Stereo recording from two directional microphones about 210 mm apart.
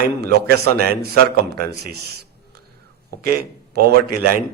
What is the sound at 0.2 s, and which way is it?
A man's voice, 50° right (ahead or behind).